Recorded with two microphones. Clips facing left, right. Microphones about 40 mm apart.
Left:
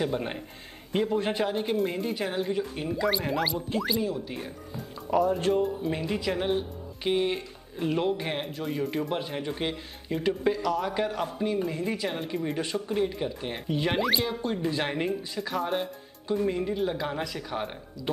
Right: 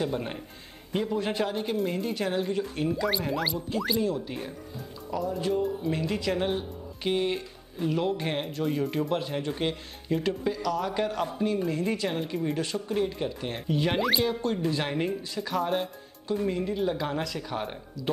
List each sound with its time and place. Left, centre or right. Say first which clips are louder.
0.0 s a man's voice: left 1 dB; centre
5.1 s speech: left 8 dB; left
5.9 s speech: right 1 dB; centre
9.1 s speech: right 2 dB; centre
10.4 s a man's voice: left 2 dB; left
10.8 s speech: even; centre
12.5 s speech: even; centre
14.4 s speech: right 1 dB; centre